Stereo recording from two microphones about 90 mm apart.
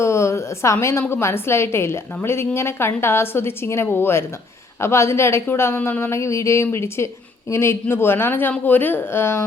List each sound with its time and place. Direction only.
0.0 s a woman's voice: 30° left (ahead or behind)